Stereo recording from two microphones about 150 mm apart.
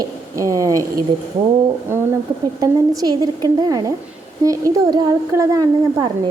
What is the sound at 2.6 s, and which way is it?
A woman's voice, 25° right (ahead or behind).